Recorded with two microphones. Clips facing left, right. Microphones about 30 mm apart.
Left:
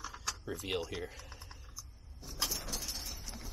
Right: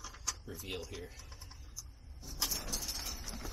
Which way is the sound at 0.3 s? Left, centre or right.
Left.